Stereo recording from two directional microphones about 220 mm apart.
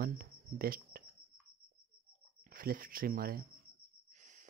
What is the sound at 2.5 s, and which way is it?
Speech, 40° right (ahead or behind).